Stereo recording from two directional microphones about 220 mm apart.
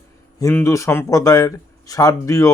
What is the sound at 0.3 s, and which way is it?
Speech, 15° left (ahead or behind).